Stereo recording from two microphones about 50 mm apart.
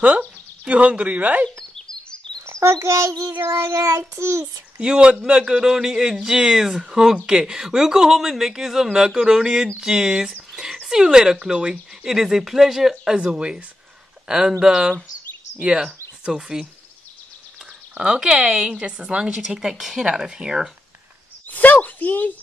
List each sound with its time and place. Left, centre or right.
0.0 s speech: right
1.6 s a sound: centre
2.4 s a child's voice: right
3.3 s child singing: right
4.7 s speech: centre
10.5 s a sound: centre
10.9 s speech: centre
13.3 s speech: centre
17.9 s speech: centre
21.5 s speech: left